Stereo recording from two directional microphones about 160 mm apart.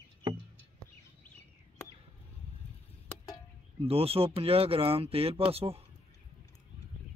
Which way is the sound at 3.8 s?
40° right (ahead or behind).